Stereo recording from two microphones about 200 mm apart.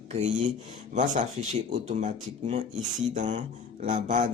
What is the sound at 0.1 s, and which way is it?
Speech, 35° right (ahead or behind).